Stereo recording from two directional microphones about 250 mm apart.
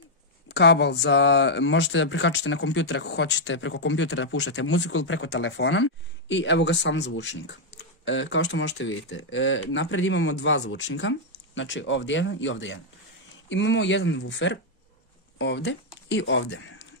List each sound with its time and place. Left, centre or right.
0.5 s speech: left